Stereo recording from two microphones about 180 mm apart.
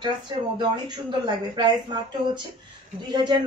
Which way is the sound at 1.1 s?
25° right (ahead or behind).